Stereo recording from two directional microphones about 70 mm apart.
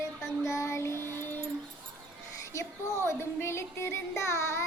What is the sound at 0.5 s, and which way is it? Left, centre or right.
Child singing, left.